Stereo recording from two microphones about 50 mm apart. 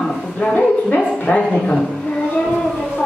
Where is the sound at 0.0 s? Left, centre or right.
Centre.